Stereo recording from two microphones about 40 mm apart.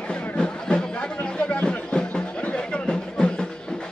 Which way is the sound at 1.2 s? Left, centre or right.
Left.